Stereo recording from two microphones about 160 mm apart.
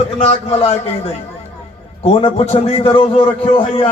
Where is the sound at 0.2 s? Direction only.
40° left (ahead or behind).